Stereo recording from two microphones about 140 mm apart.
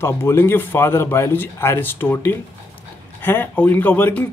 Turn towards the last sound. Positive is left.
turn(degrees=10)  # may be behind; listen again after turning